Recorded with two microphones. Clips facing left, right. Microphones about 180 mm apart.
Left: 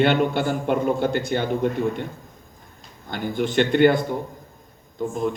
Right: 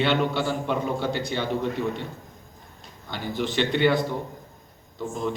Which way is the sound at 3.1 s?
50° left (ahead or behind).